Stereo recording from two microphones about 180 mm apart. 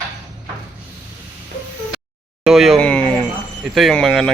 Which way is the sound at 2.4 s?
Centre (ahead or behind).